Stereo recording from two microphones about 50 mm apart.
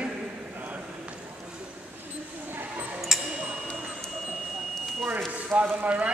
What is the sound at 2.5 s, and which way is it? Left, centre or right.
Tick-tock, right.